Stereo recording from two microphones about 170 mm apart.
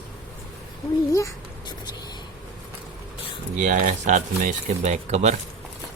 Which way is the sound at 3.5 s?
45° right (ahead or behind).